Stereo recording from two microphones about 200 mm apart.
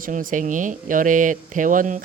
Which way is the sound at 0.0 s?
40° right (ahead or behind).